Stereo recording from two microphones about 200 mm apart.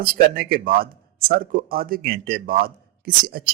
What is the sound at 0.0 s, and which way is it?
Speech, 45° right (ahead or behind).